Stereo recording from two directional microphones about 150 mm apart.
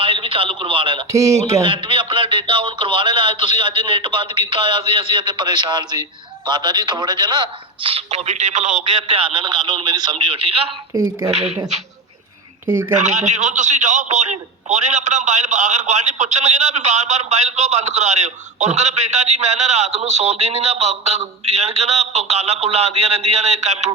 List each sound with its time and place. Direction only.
0.0 s a man's voice: 35° right (ahead or behind)
1.1 s speech: 20° right (ahead or behind)
1.6 s speech: 35° right (ahead or behind); by 8.8 s 55° right (ahead or behind)
9.0 s speech: 35° right (ahead or behind)
10.9 s speech: 20° right (ahead or behind)
11.3 s a man's voice: 45° right (ahead or behind)
13.0 s a man's voice: 50° right (ahead or behind)